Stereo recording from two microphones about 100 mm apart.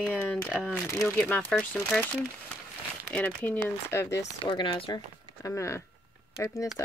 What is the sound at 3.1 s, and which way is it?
Speech, 10° left (ahead or behind).